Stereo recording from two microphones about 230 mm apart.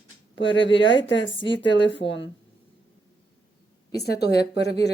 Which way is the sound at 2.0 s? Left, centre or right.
Left.